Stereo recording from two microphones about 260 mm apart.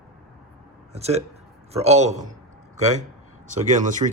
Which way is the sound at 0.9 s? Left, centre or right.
Right.